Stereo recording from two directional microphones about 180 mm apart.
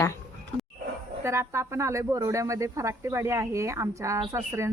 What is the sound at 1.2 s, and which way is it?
Speech, 15° right (ahead or behind).